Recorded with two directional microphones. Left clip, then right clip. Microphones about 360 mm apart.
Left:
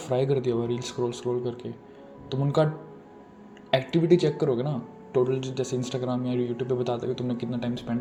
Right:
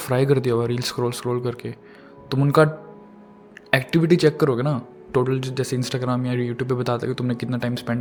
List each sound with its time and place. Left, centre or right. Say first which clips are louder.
0.0 s speech: right 5 dB; right
3.7 s speech: right 3 dB; right